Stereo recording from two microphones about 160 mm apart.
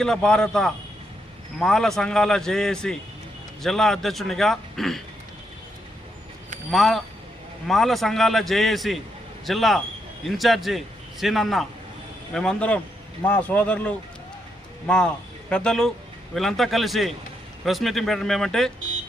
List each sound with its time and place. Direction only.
0.0 s a man's voice: 5° left (ahead or behind)
6.7 s a man's voice: centre (ahead or behind)